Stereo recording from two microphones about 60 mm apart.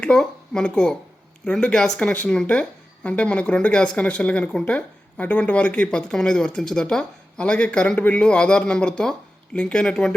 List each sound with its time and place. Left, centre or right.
0.0 s speech: centre